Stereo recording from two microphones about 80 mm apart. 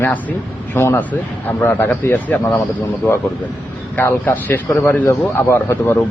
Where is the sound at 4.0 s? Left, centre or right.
Left.